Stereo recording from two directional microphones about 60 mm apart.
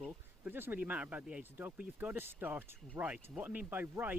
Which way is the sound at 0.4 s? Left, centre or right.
Right.